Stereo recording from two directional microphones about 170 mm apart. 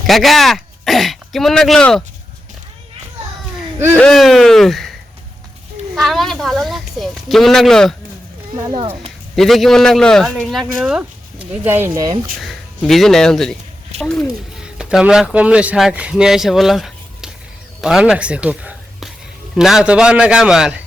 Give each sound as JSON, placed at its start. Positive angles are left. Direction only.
{"t": 0.1, "sound": "speech", "side_deg": 0}
{"t": 3.9, "sound": "a woman's voice", "side_deg": 5}
{"t": 8.5, "sound": "speech", "side_deg": -25}
{"t": 9.3, "sound": "a woman's voice", "side_deg": 0}
{"t": 12.4, "sound": "a woman's voice", "side_deg": 0}